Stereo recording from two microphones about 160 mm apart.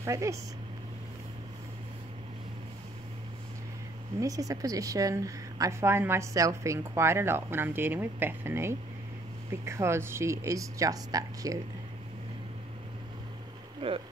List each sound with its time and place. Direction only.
0.0 s speech: 20° right (ahead or behind)
4.2 s a woman's voice: 20° right (ahead or behind)
13.7 s speech: 35° right (ahead or behind)